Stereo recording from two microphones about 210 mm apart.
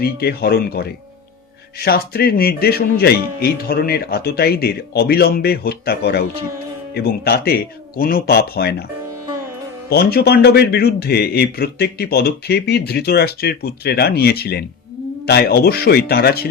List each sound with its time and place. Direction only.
0.0 s a man's voice: 50° left (ahead or behind)
9.9 s a man's voice: 50° left (ahead or behind)